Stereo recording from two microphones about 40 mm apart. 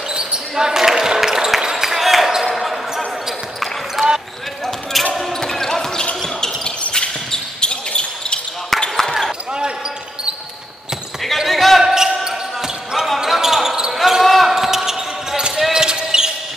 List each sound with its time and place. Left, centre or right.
0.1 s basketball bounce: right; by 5.1 s centre
5.4 s basketball bounce: centre
8.7 s basketball bounce: centre
11.3 s basketball bounce: centre
11.8 s basketball bounce: centre